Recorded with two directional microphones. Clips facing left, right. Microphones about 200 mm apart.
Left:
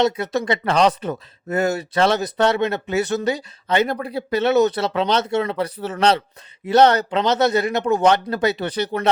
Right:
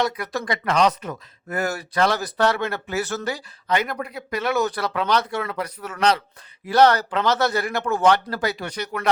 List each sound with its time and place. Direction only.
0.0 s speech: 25° left (ahead or behind)